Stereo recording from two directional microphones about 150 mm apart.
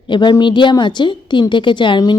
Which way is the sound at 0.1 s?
30° left (ahead or behind).